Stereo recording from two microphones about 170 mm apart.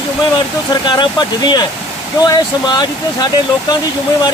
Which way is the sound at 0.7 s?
25° left (ahead or behind).